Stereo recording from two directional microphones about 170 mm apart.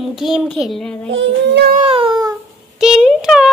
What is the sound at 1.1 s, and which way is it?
Child singing, 90° right.